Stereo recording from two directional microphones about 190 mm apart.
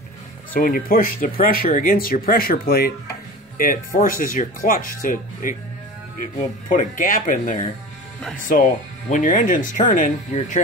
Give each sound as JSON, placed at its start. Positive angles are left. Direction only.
{"t": 0.6, "sound": "speech", "side_deg": 45}
{"t": 6.7, "sound": "speech", "side_deg": 45}